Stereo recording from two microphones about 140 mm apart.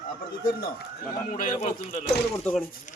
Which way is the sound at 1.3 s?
80° left.